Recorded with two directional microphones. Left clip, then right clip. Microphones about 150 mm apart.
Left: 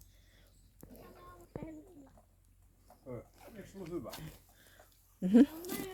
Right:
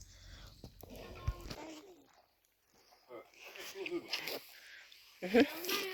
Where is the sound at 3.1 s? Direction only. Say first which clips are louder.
Left 5 dB; 15° left (ahead or behind).